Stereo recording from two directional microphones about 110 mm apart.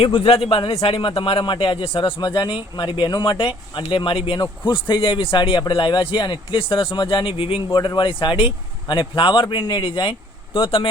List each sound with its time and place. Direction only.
0.0 s a man's voice: 60° left (ahead or behind)
7.8 s speech: 45° left (ahead or behind)